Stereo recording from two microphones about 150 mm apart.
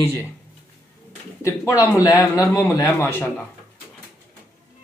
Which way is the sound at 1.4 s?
20° left (ahead or behind).